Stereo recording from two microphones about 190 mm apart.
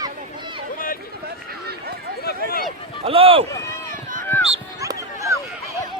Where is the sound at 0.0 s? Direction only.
25° right (ahead or behind).